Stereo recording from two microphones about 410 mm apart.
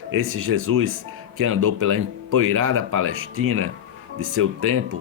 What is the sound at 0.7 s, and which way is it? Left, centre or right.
Speech, right.